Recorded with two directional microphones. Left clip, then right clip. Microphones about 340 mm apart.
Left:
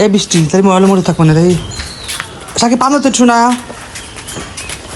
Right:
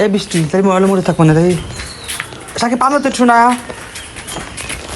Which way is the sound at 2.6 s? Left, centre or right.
Centre.